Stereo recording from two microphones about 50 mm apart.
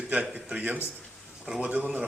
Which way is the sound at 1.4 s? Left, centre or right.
Centre.